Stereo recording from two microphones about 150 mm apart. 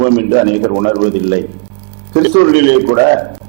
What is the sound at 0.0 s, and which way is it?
A man's voice, 15° right (ahead or behind).